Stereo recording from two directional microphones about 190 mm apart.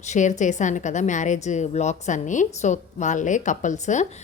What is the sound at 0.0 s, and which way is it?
A woman's voice, 40° left (ahead or behind).